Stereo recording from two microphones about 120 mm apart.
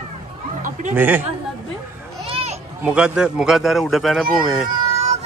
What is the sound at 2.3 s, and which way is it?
Children playing, 60° right (ahead or behind).